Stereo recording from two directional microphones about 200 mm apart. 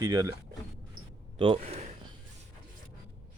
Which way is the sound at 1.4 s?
30° right (ahead or behind).